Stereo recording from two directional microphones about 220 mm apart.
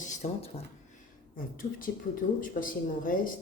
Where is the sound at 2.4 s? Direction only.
40° left (ahead or behind).